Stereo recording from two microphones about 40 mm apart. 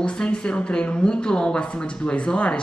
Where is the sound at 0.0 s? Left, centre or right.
Left.